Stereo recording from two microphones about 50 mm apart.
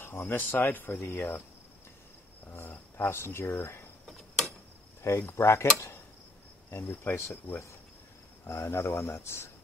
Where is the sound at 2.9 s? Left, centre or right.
Left.